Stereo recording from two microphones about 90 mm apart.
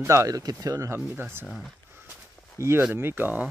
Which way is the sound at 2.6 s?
35° right (ahead or behind).